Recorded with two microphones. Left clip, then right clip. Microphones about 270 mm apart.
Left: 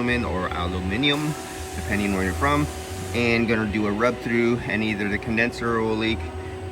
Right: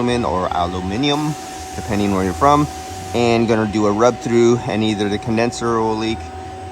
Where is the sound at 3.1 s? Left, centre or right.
Centre.